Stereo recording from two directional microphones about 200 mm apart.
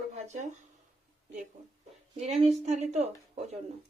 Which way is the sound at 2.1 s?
35° right (ahead or behind).